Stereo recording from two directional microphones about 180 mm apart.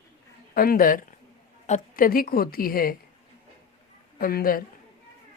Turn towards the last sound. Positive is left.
turn(degrees=55)  # may be behind; listen again after turning